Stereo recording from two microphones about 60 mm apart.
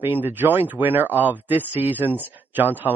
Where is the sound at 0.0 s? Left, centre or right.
Right.